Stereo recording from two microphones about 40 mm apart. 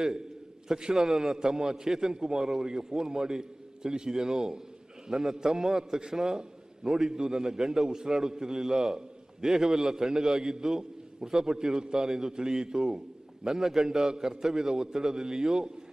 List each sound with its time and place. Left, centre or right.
0.7 s a man's voice: centre